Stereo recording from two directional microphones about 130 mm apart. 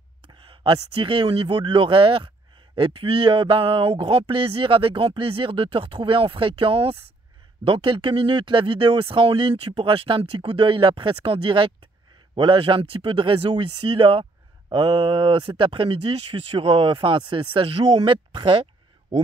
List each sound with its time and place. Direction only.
0.5 s speech: 40° right (ahead or behind)